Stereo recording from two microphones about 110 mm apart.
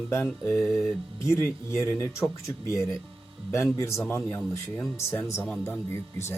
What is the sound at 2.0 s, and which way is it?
Speech, 25° left (ahead or behind).